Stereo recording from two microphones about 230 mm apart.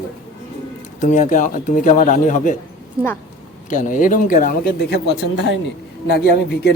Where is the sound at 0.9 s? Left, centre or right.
Left.